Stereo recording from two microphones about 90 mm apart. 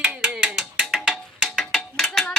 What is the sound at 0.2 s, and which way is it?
Music, 10° right (ahead or behind).